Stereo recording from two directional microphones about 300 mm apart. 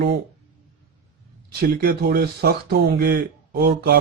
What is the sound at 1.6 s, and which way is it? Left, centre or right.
Speech, right.